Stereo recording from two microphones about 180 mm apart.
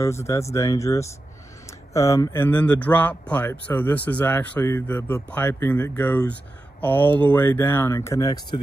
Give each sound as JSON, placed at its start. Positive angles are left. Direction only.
{"t": 0.0, "sound": "speech", "side_deg": 15}